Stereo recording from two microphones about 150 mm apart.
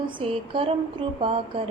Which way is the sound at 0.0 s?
35° right (ahead or behind).